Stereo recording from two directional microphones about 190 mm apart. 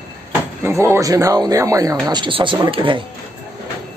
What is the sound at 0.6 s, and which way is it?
Speech, 15° right (ahead or behind).